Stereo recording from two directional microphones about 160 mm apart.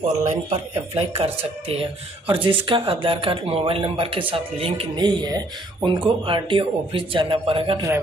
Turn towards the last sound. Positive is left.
turn(degrees=-35)  # may be behind; listen again after turning